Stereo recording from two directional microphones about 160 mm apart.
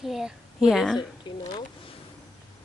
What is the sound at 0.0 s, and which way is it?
A woman's voice, centre (ahead or behind).